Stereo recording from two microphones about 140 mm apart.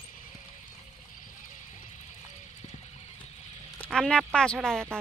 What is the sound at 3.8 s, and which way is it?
A woman's voice, 5° left (ahead or behind).